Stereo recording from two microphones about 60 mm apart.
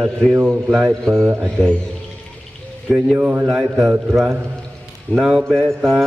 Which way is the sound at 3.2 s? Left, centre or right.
Right.